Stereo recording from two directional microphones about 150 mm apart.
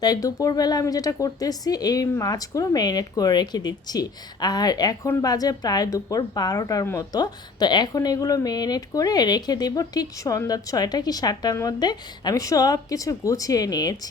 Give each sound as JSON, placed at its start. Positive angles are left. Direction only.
{"t": 0.0, "sound": "a woman's voice", "side_deg": 25}